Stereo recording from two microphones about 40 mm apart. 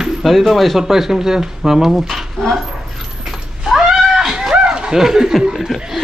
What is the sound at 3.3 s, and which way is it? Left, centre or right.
Cat, centre.